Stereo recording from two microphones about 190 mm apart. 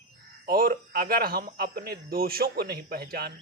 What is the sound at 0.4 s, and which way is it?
Speech, 50° right (ahead or behind).